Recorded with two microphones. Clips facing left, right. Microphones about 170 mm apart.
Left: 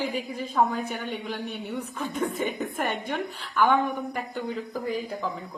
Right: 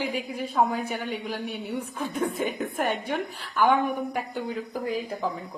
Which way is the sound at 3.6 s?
10° right (ahead or behind).